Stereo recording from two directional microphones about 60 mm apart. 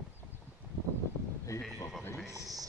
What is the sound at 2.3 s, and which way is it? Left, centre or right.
Speech, right.